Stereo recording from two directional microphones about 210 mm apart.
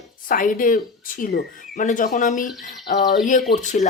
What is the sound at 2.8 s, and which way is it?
Speech, 55° left (ahead or behind).